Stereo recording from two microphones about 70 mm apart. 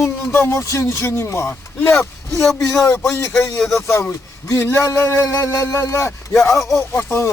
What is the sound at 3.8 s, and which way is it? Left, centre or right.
Speech, left.